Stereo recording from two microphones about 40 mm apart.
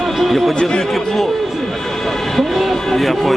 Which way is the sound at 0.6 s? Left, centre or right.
Centre.